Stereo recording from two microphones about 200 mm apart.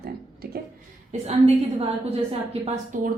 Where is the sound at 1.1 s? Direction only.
30° right (ahead or behind).